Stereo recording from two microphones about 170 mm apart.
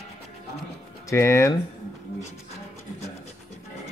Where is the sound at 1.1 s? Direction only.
15° left (ahead or behind).